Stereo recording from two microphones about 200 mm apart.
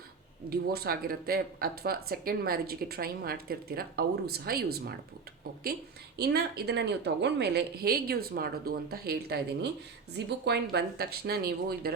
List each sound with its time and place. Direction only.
0.5 s speech: 50° right (ahead or behind)
6.1 s speech: 55° right (ahead or behind)